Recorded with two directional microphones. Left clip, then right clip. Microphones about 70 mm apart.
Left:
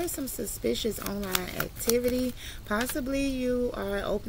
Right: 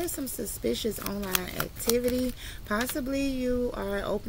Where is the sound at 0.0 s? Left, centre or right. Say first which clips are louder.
Even; right.